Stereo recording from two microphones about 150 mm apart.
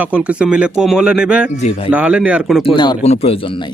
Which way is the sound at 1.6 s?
40° left (ahead or behind).